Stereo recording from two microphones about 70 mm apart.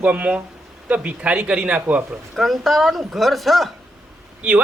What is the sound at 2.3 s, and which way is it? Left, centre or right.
A woman's voice, centre.